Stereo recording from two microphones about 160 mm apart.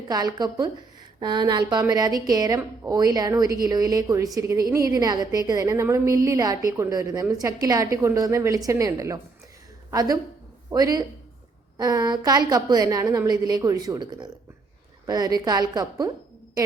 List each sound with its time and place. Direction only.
0.1 s a woman's voice: 25° right (ahead or behind)